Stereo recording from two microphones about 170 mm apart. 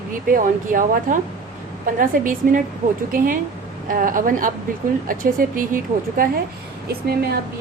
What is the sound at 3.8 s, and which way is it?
A woman's voice, 55° right (ahead or behind).